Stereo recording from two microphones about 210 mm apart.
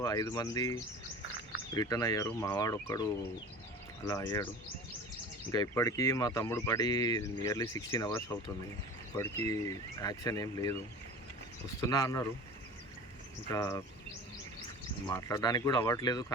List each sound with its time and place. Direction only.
0.0 s speech: 15° left (ahead or behind)
5.5 s speech: 20° left (ahead or behind)
11.8 s speech: 15° left (ahead or behind)
13.5 s speech: 15° left (ahead or behind)
15.1 s speech: 15° left (ahead or behind)